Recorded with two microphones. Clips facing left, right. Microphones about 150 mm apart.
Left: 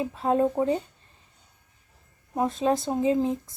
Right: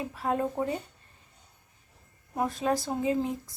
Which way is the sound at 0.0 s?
25° left (ahead or behind).